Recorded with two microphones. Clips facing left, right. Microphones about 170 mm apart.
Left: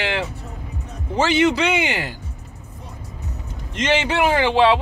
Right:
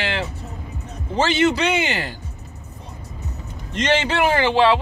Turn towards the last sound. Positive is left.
turn(degrees=20)  # may be behind; listen again after turning